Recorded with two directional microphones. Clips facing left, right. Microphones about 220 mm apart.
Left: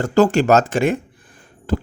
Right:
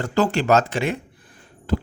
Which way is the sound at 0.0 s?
45° left (ahead or behind).